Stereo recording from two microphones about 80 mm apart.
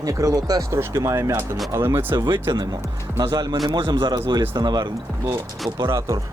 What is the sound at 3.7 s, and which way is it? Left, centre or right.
Speech, right.